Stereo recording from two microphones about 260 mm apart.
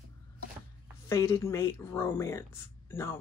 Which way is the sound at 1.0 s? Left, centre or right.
Centre.